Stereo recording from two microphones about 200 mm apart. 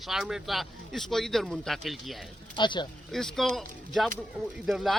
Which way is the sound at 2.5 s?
25° left (ahead or behind).